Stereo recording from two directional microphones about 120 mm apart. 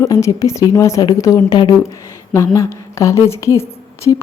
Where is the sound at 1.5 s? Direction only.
40° left (ahead or behind).